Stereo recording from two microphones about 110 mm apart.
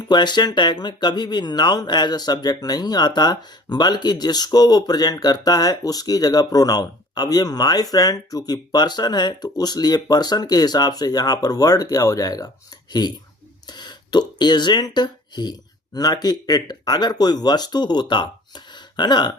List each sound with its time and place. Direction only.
0.0 s speech: 40° left (ahead or behind)